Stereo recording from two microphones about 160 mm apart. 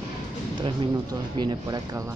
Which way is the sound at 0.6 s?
30° right (ahead or behind).